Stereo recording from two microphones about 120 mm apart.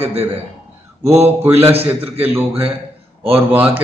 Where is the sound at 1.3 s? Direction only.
15° right (ahead or behind).